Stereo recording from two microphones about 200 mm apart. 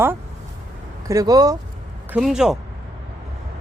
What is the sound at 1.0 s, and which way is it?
Speech, 15° right (ahead or behind).